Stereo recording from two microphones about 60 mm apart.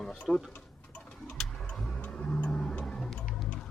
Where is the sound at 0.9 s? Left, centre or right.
Centre.